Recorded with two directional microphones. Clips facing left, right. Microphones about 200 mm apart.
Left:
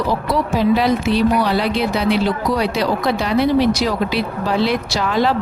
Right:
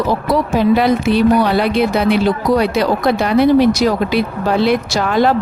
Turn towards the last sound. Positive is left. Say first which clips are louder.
# right 4 dB
turn(degrees=-50)  # may be behind; listen again after turning